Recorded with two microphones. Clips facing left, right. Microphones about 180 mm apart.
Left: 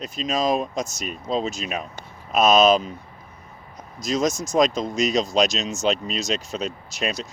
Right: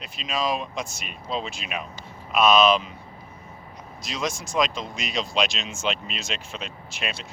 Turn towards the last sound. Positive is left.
turn(degrees=40)  # may be behind; listen again after turning